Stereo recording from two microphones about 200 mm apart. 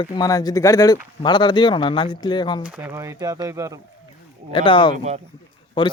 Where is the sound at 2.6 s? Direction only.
10° right (ahead or behind).